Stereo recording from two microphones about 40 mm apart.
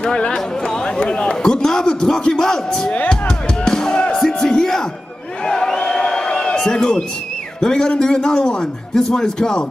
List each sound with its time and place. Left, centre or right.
0.0 s a man's voice: left
3.1 s music: centre
5.4 s crowd: centre
6.7 s a man's voice: centre